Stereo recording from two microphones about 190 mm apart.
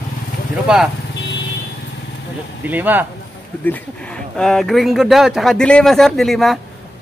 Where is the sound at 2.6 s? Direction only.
10° right (ahead or behind).